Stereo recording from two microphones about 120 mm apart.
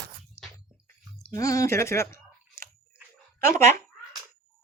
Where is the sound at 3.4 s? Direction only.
20° left (ahead or behind).